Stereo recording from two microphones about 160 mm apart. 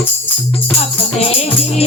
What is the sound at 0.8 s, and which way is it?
Music, 40° left (ahead or behind).